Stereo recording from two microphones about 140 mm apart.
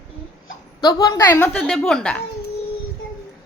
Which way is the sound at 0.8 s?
30° left (ahead or behind).